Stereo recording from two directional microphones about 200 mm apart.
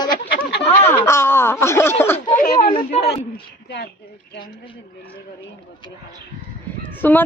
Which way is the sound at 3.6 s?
60° left (ahead or behind).